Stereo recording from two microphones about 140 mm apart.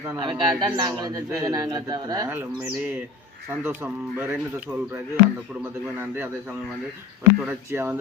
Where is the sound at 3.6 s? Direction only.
15° right (ahead or behind).